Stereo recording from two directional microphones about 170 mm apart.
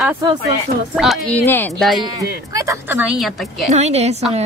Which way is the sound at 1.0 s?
5° left (ahead or behind).